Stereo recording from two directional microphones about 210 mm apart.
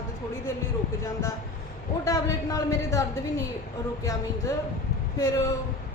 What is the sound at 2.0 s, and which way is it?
A woman's voice, 15° left (ahead or behind).